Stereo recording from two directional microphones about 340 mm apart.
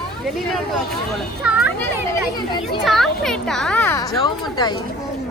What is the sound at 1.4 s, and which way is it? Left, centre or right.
Speech, centre.